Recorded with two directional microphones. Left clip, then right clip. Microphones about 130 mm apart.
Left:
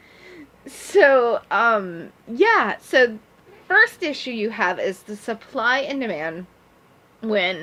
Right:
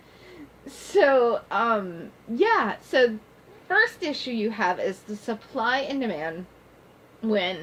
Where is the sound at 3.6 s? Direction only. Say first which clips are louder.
Left 5 dB; 45° left (ahead or behind).